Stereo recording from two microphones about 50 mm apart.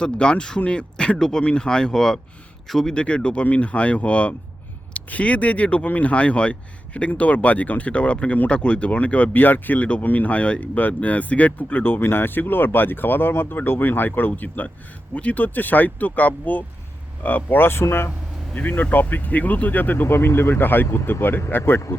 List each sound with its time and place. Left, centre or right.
0.0 s speech: centre
2.9 s speech: centre
17.6 s speech: left
18.5 s speech: left
21.6 s speech: left